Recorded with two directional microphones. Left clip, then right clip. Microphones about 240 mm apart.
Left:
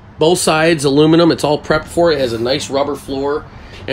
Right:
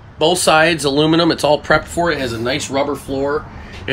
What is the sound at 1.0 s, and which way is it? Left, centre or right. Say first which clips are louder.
Speech: left 3 dB; left.